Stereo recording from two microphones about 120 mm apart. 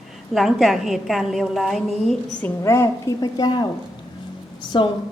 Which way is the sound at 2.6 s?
25° left (ahead or behind).